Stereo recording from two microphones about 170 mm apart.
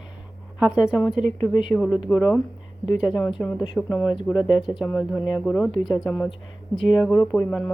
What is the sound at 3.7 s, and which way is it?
Speech, centre (ahead or behind).